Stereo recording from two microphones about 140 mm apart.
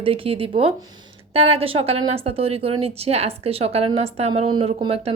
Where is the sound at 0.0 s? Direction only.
40° right (ahead or behind).